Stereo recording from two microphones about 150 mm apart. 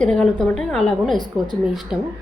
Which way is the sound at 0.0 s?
5° left (ahead or behind).